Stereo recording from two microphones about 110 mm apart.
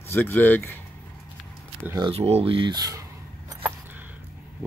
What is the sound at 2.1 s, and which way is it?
Speech, 70° right (ahead or behind).